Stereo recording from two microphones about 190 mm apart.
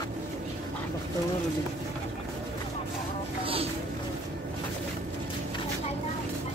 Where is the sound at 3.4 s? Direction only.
30° right (ahead or behind).